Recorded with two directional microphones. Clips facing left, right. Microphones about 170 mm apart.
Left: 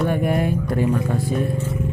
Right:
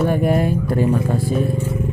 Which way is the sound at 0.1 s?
35° right (ahead or behind).